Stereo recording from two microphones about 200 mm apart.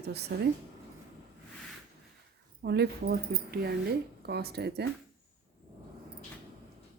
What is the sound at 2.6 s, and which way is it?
Speech, 55° right (ahead or behind).